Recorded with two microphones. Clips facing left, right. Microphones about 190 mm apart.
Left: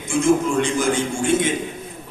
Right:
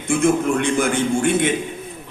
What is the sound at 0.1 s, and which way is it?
A man's voice, 60° right (ahead or behind).